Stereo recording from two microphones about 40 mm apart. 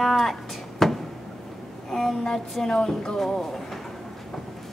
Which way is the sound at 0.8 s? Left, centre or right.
Centre.